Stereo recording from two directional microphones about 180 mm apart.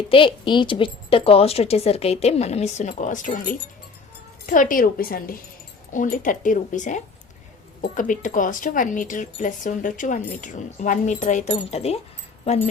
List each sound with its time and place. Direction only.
0.1 s a woman's voice: 30° left (ahead or behind)